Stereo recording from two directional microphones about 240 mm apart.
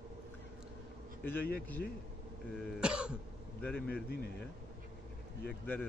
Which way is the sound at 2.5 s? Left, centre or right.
Centre.